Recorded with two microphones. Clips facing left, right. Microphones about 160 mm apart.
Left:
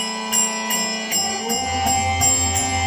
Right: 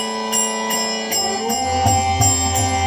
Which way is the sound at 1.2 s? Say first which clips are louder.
Right 4 dB; 40° right (ahead or behind).